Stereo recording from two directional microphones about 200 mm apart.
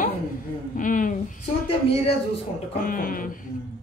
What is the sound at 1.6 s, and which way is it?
Speech, 30° left (ahead or behind).